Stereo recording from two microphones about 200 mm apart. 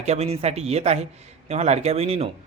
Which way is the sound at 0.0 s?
30° right (ahead or behind).